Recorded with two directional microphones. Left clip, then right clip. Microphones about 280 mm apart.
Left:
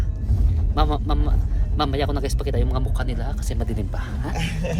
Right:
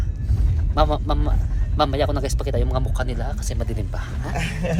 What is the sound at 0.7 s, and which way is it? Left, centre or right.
A man's voice, centre.